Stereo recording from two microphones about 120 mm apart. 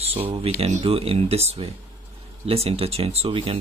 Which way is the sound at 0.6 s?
65° right (ahead or behind).